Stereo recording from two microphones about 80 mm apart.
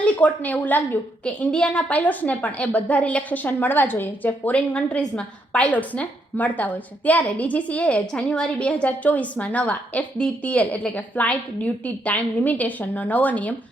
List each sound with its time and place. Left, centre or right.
0.0 s a woman's voice: centre
1.2 s a woman's voice: centre